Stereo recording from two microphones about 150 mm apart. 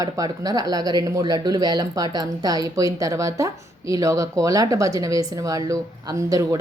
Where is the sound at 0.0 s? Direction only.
25° right (ahead or behind).